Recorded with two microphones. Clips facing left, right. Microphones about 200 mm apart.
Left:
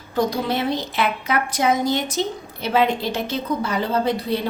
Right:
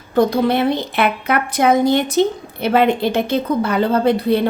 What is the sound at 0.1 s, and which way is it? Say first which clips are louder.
A woman's voice: right 7 dB; 60° right (ahead or behind).